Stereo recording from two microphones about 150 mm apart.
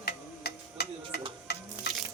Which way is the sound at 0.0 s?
90° left.